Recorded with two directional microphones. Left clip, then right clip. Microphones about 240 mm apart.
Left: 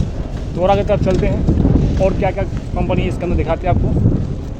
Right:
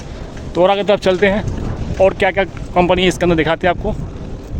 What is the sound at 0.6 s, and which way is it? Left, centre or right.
Speech, right.